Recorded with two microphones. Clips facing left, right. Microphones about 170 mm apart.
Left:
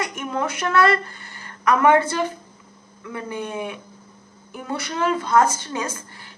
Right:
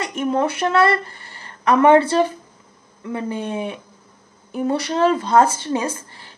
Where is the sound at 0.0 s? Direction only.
30° right (ahead or behind).